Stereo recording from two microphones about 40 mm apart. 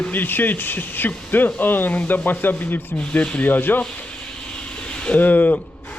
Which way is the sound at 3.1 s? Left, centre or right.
Left.